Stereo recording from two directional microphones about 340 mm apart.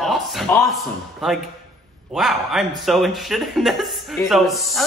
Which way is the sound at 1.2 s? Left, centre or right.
Centre.